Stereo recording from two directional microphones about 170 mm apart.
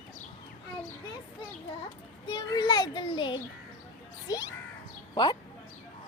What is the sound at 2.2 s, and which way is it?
A child's voice, 25° left (ahead or behind).